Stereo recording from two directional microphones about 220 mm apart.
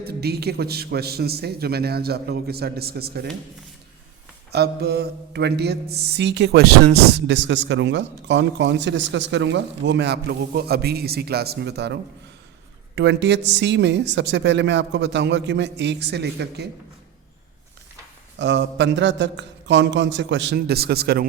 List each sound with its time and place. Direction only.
0.0 s mantra: 45° right (ahead or behind)
4.5 s mantra: 50° right (ahead or behind)
13.0 s mantra: 55° right (ahead or behind)
18.3 s mantra: 55° right (ahead or behind)